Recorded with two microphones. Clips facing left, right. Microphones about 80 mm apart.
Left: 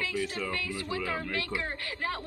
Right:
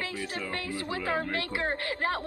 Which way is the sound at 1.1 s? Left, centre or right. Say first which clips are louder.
Right 3 dB; right.